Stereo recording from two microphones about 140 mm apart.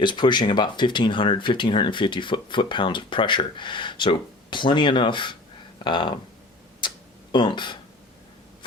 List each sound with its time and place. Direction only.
0.0 s speech: 35° left (ahead or behind)
6.8 s tick-tock: 35° left (ahead or behind)
7.3 s speech: 35° left (ahead or behind)